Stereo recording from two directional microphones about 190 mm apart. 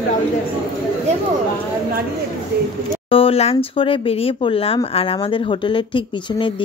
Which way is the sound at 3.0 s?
30° left (ahead or behind).